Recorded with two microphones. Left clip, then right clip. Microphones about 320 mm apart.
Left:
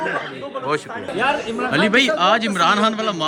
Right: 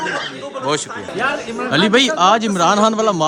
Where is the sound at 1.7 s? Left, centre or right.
Centre.